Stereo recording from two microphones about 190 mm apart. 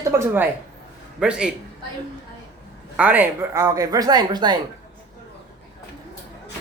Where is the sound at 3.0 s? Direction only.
10° right (ahead or behind).